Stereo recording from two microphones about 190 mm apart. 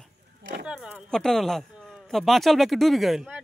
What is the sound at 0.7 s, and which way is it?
Speech, centre (ahead or behind).